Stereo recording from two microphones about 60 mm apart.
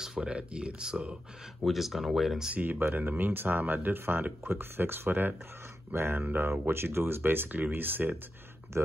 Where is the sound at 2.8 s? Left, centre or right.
Right.